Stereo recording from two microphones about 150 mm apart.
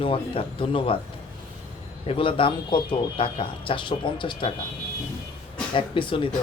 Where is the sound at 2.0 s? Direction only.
35° left (ahead or behind).